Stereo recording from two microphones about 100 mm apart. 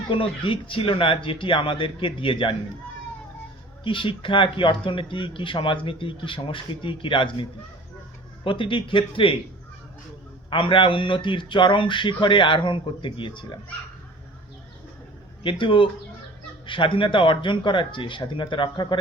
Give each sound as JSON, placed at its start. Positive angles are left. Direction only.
{"t": 0.1, "sound": "speech", "side_deg": 60}
{"t": 3.8, "sound": "speech", "side_deg": 60}
{"t": 8.4, "sound": "speech", "side_deg": 60}
{"t": 10.5, "sound": "speech", "side_deg": 60}
{"t": 15.4, "sound": "speech", "side_deg": 55}